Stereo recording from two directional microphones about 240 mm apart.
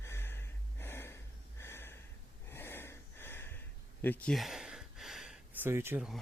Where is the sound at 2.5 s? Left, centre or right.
Centre.